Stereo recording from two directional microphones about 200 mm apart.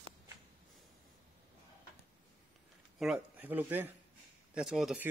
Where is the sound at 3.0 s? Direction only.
5° right (ahead or behind).